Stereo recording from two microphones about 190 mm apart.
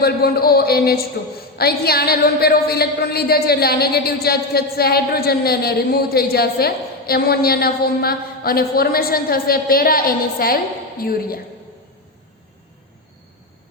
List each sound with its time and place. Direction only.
0.0 s a woman's voice: 55° left (ahead or behind)